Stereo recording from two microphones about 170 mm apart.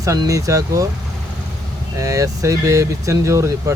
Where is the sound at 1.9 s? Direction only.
20° right (ahead or behind).